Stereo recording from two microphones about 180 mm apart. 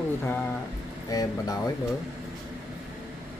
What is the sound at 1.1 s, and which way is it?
Speech, 20° left (ahead or behind).